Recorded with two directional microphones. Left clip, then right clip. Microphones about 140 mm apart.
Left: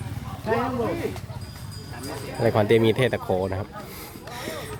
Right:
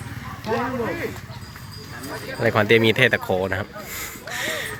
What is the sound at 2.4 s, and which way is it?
Speech, 15° left (ahead or behind).